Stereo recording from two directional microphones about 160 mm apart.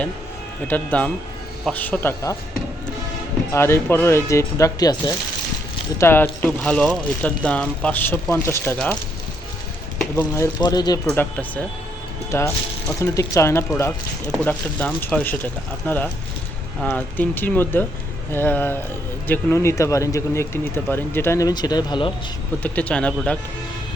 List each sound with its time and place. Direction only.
0.7 s speech: 10° left (ahead or behind)
3.5 s speech: 15° left (ahead or behind)
10.0 s speech: 15° left (ahead or behind)
10.6 s speech: 25° left (ahead or behind)
11.1 s speech: 10° left (ahead or behind); by 22.1 s 30° left (ahead or behind)
22.6 s speech: 10° left (ahead or behind)